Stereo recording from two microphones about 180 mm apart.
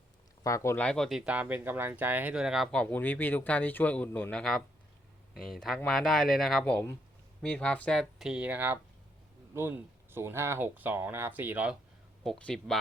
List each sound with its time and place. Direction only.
0.4 s speech: 15° left (ahead or behind)
0.9 s speech: centre (ahead or behind)
12.2 s speech: 5° left (ahead or behind)